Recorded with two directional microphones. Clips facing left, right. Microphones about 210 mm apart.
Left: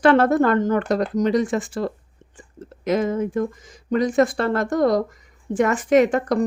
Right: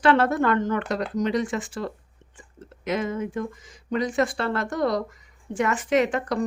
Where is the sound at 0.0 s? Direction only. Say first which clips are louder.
Left 5 dB; 45° left (ahead or behind).